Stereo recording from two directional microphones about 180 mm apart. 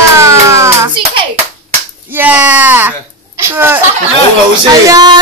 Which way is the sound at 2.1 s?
10° right (ahead or behind).